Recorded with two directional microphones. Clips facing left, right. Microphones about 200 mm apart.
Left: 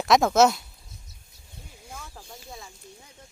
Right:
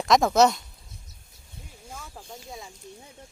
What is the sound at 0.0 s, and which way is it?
Speech, centre (ahead or behind).